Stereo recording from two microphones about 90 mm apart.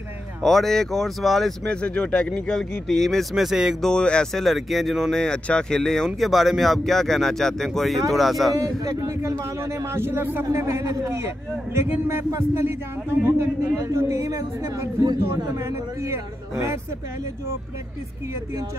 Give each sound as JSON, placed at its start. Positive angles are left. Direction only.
{"t": 0.4, "sound": "speech", "side_deg": 5}
{"t": 3.8, "sound": "speech", "side_deg": 10}
{"t": 8.5, "sound": "a man's voice", "side_deg": -40}
{"t": 10.5, "sound": "a man's voice", "side_deg": -35}